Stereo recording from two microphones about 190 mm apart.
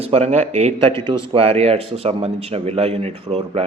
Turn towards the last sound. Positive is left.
turn(degrees=-30)  # may be behind; listen again after turning